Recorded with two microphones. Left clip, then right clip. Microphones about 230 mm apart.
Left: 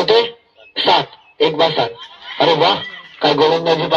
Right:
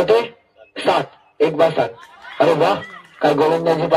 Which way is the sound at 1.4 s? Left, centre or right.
Right.